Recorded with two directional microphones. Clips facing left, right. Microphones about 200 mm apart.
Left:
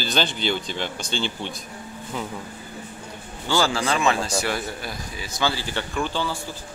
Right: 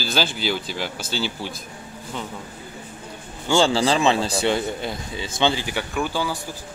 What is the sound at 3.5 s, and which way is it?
A man's voice, 30° right (ahead or behind).